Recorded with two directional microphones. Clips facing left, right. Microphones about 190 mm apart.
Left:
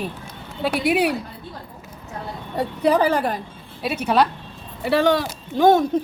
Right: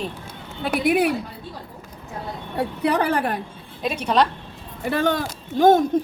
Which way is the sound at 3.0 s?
60° right (ahead or behind).